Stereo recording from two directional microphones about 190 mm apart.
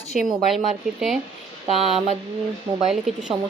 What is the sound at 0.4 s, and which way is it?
Speech, centre (ahead or behind).